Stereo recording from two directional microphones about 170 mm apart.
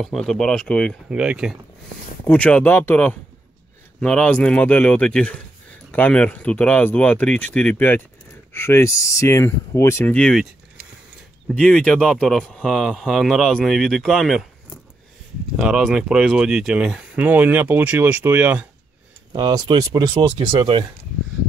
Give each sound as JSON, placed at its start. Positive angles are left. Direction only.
{"t": 0.0, "sound": "speech", "side_deg": 0}
{"t": 1.1, "sound": "speech", "side_deg": -5}
{"t": 2.2, "sound": "speech", "side_deg": 10}
{"t": 11.4, "sound": "speech", "side_deg": 5}
{"t": 19.3, "sound": "speech", "side_deg": -25}